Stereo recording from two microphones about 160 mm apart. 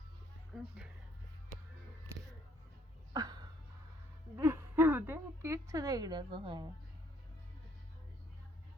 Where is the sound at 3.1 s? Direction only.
25° right (ahead or behind).